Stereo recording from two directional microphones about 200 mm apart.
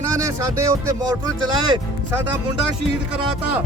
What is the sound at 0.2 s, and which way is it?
Speech, 15° right (ahead or behind).